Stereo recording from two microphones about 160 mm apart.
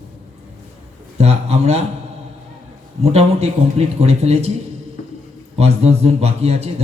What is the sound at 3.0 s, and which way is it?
A man's voice, 40° right (ahead or behind).